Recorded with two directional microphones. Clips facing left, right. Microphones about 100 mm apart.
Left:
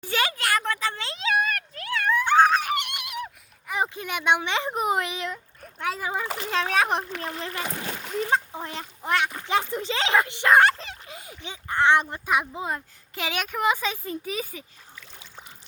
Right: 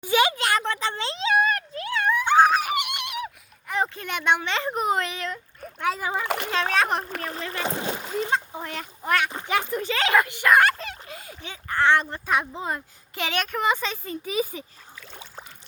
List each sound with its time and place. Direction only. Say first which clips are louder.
0.0 s a sound: right 5 dB; 15° right (ahead or behind); by 3.2 s centre (ahead or behind)
3.7 s speech: right 1 dB; 10° left (ahead or behind)
5.8 s a child's voice: right 2 dB; centre (ahead or behind)
6.2 s a child's voice: right 4 dB; 60° right (ahead or behind)
6.7 s speech: even; 15° left (ahead or behind)
7.0 s speech: right 1 dB; 40° right (ahead or behind)
7.5 s speech: right 4 dB; 30° right (ahead or behind)
8.3 s speech: left 1 dB; 25° left (ahead or behind); by 14.3 s 5° left (ahead or behind)